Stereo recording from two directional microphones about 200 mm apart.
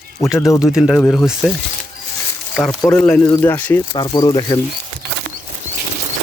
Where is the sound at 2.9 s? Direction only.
5° left (ahead or behind).